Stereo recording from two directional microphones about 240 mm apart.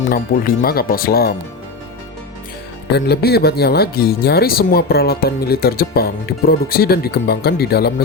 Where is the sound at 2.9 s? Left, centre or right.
Left.